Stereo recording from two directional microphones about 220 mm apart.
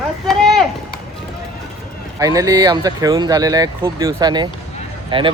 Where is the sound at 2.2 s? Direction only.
15° right (ahead or behind).